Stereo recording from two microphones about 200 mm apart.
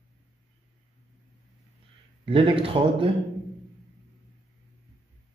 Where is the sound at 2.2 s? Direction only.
25° right (ahead or behind).